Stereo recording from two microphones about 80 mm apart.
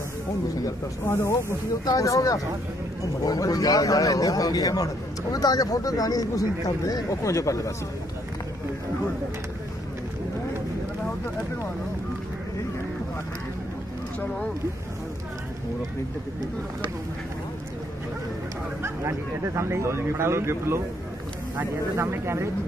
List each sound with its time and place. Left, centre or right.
1.0 s speech: left
1.9 s a man's voice: left
18.8 s speech: right
21.9 s speech: right